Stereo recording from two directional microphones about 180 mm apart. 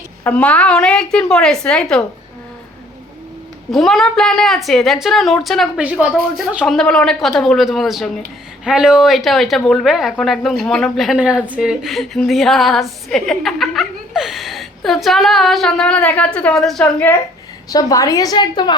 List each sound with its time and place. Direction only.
0.3 s speech: 5° left (ahead or behind)
3.7 s speech: centre (ahead or behind)
17.7 s a woman's voice: 20° left (ahead or behind)